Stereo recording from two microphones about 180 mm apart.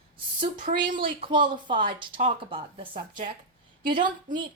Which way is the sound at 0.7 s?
45° right (ahead or behind).